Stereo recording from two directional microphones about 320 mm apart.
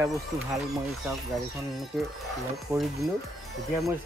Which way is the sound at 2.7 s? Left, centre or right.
Centre.